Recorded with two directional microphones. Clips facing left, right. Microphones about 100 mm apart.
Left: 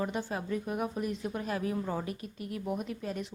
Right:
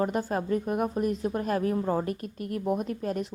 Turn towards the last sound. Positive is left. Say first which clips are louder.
# right 6 dB
turn(degrees=-45)  # may be behind; listen again after turning